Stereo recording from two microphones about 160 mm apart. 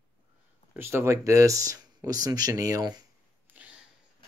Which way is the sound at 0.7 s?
15° right (ahead or behind).